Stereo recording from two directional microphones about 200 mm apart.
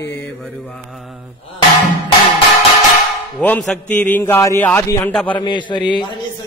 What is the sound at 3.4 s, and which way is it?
A man's voice, 10° left (ahead or behind).